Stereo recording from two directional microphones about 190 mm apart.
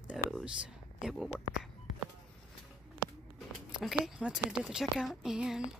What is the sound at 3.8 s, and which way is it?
A woman's voice, centre (ahead or behind).